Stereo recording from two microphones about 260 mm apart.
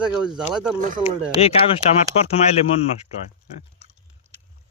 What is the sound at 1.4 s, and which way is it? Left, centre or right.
Speech, left.